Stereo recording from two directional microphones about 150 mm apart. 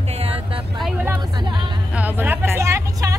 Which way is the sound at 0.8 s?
Centre (ahead or behind).